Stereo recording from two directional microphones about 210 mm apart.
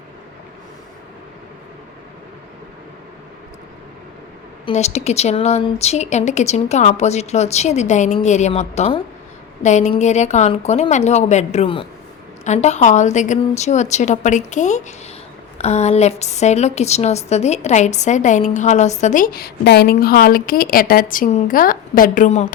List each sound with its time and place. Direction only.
4.6 s a woman's voice: 30° left (ahead or behind)